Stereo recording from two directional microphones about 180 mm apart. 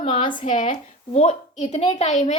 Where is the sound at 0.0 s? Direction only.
25° left (ahead or behind).